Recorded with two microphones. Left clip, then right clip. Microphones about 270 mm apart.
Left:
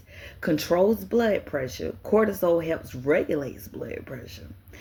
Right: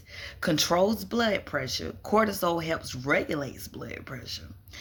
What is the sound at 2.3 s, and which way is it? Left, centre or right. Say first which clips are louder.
Speech: left 4 dB; centre.